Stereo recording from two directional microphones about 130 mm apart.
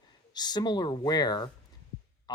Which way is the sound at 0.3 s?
30° left (ahead or behind).